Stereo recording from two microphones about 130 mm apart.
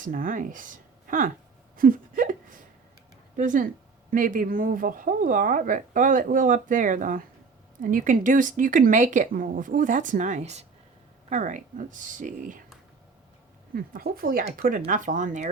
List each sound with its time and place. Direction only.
0.0 s speech: 90° right
1.7 s a sound: 90° right
3.3 s speech: 90° right; by 10.7 s 60° right (ahead or behind)
11.3 s speech: 75° right (ahead or behind); by 12.6 s 90° right
13.9 s speech: 90° right; by 15.4 s 70° right (ahead or behind)